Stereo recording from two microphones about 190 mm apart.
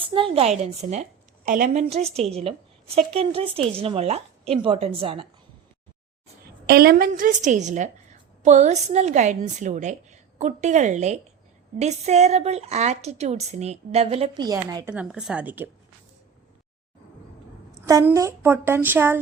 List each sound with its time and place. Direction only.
0.0 s a woman's voice: 25° right (ahead or behind)
6.7 s a woman's voice: 50° right (ahead or behind); by 14.4 s 30° right (ahead or behind)
14.4 s a woman's voice: 20° right (ahead or behind)
14.9 s speech: 5° right (ahead or behind)
17.8 s speech: 15° right (ahead or behind)